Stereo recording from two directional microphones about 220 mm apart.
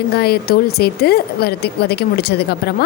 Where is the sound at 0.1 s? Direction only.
45° left (ahead or behind).